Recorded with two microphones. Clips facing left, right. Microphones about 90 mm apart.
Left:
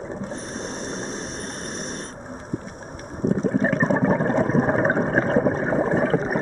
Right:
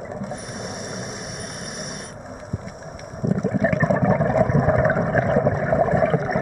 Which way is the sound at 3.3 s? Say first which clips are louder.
Even; 35° left (ahead or behind).